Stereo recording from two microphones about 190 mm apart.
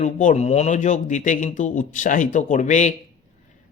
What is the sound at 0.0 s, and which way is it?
Speech, 40° left (ahead or behind).